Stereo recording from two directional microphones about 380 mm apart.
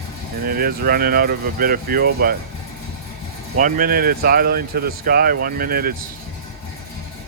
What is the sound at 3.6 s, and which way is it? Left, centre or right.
Speech, right.